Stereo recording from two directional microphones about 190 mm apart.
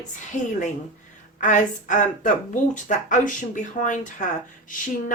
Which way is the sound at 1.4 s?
40° left (ahead or behind).